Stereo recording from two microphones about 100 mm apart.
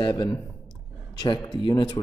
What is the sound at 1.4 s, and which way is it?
Speech, 45° left (ahead or behind).